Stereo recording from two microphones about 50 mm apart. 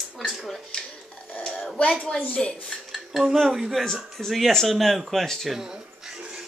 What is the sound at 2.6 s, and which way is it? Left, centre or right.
Cutlery, centre.